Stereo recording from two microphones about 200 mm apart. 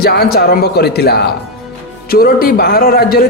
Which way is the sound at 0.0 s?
50° left (ahead or behind).